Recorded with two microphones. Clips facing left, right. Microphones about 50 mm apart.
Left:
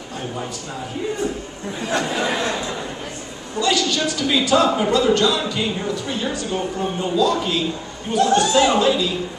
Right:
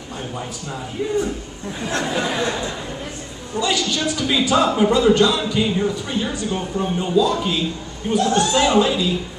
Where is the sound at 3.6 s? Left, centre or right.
Centre.